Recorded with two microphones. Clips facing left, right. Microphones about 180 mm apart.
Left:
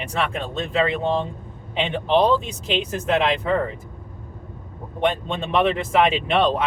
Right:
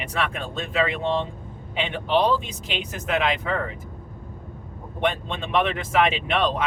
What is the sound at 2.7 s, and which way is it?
Speech, 30° left (ahead or behind).